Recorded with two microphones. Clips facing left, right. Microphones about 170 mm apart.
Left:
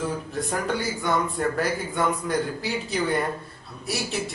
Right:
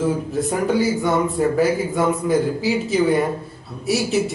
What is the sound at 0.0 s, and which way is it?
A man's voice, 5° right (ahead or behind).